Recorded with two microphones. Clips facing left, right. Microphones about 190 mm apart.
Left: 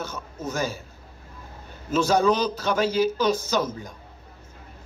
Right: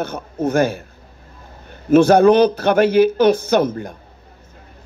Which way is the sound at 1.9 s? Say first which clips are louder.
Right 10 dB; 60° right (ahead or behind).